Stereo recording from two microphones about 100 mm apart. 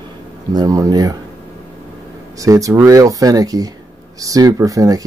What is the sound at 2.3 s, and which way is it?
Speech, 35° right (ahead or behind).